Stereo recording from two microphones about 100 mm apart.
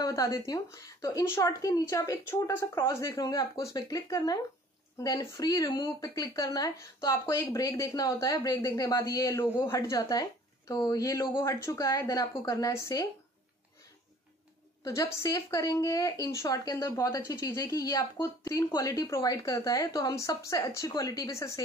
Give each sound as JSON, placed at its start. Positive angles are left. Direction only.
{"t": 0.0, "sound": "a woman's voice", "side_deg": 35}
{"t": 14.9, "sound": "a woman's voice", "side_deg": 30}